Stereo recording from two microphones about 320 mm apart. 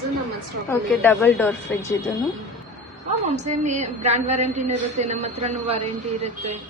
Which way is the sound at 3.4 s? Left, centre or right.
Right.